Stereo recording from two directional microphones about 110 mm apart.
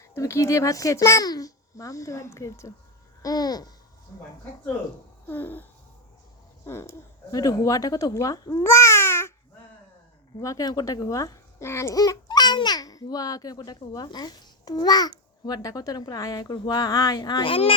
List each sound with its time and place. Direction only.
0.0 s a child's voice: 25° left (ahead or behind)
5.3 s a sound: 15° left (ahead or behind)
6.7 s a child's voice: 25° left (ahead or behind)
10.3 s a child's voice: 30° left (ahead or behind)
17.5 s speech: 55° left (ahead or behind)